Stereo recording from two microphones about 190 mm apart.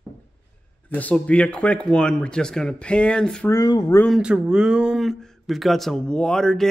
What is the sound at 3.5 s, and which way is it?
Speech, 20° left (ahead or behind).